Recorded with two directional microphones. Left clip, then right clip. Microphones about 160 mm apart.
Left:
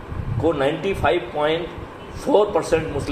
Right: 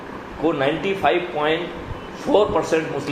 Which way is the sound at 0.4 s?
50° left (ahead or behind).